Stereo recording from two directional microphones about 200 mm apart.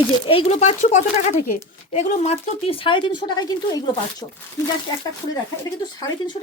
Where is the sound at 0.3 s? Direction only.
30° left (ahead or behind).